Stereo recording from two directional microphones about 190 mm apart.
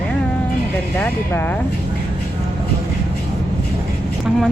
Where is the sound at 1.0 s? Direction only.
10° left (ahead or behind).